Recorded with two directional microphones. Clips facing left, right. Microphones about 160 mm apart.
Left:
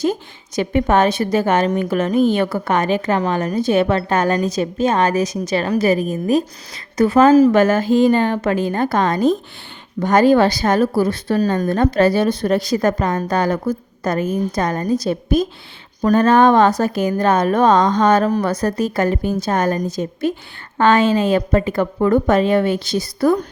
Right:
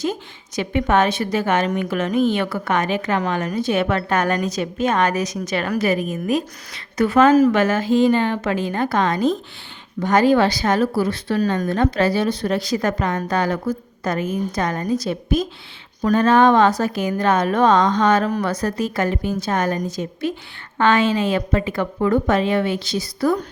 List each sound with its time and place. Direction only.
0.0 s a woman's voice: 40° left (ahead or behind)